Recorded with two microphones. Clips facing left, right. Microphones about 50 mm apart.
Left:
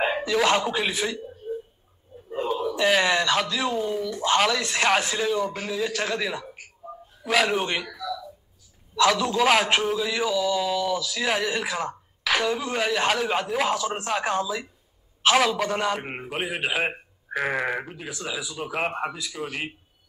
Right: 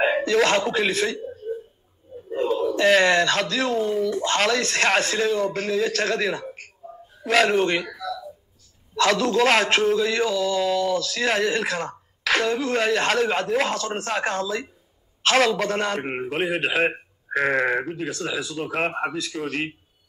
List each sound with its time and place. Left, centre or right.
0.0 s speech: centre
2.3 s a sound: centre
2.6 s a man's voice: centre
7.5 s a man's voice: centre
7.8 s a sound: centre
9.0 s a man's voice: centre